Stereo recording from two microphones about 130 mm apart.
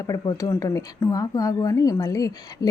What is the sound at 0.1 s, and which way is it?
Speech, 30° left (ahead or behind).